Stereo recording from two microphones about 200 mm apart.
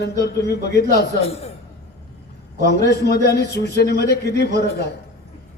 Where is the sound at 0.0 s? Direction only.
55° left (ahead or behind).